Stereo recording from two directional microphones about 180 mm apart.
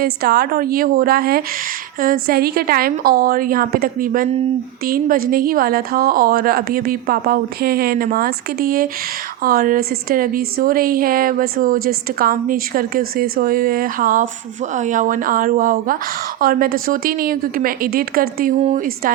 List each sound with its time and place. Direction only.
0.0 s a woman's voice: 60° right (ahead or behind)